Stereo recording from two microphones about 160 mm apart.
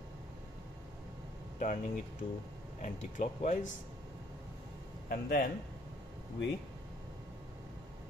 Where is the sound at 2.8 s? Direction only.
50° left (ahead or behind).